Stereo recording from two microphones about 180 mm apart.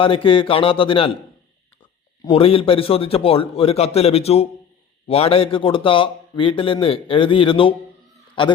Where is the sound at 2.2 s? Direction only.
30° left (ahead or behind).